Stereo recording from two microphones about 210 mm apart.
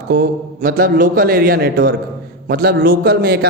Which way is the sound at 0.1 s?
40° right (ahead or behind).